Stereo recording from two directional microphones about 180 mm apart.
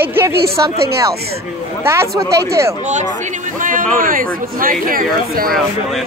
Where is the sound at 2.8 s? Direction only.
40° right (ahead or behind).